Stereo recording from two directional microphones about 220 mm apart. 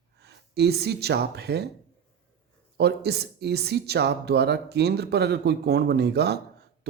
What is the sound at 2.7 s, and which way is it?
Speech, 45° right (ahead or behind).